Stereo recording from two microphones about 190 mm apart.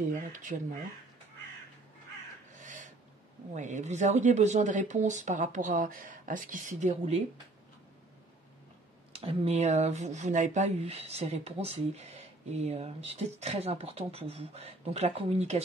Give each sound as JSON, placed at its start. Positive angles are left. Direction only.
{"t": 0.1, "sound": "speech", "side_deg": -45}
{"t": 2.6, "sound": "a sound", "side_deg": -40}
{"t": 3.5, "sound": "speech", "side_deg": -40}
{"t": 9.1, "sound": "speech", "side_deg": -30}